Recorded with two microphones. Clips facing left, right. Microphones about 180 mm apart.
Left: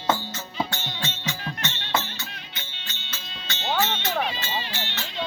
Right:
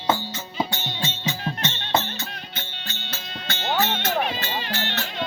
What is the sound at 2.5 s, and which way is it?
Music, 55° right (ahead or behind).